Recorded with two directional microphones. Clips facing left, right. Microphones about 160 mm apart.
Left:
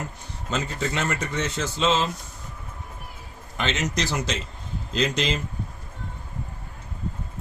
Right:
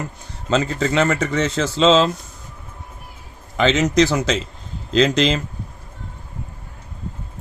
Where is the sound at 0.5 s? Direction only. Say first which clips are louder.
Right 9 dB; 90° right.